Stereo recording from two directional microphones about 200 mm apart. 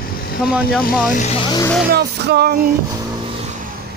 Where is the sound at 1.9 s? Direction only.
55° right (ahead or behind).